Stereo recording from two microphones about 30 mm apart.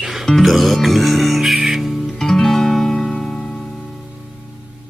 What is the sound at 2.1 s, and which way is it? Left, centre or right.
Music, centre.